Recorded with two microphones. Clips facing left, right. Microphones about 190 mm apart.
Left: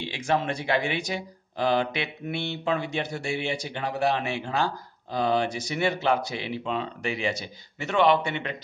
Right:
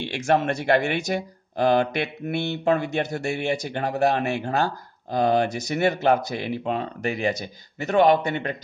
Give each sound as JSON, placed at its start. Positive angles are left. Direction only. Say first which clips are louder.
{"t": 0.1, "sound": "speech", "louder": "right 5 dB", "side_deg": -50}